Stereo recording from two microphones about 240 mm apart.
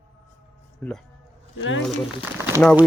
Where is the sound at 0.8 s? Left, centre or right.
Centre.